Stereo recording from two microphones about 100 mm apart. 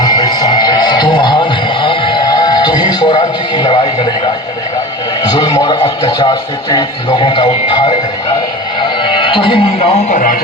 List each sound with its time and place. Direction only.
0.0 s music: 45° left (ahead or behind)
5.2 s a man's voice: 45° left (ahead or behind)
8.8 s music: 55° left (ahead or behind); by 10.0 s 75° left (ahead or behind)